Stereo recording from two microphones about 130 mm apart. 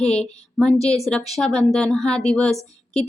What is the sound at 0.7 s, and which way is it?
Speech, 55° left (ahead or behind).